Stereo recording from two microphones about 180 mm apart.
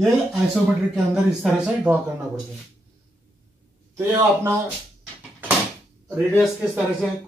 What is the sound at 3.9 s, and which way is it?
Speech, 15° right (ahead or behind).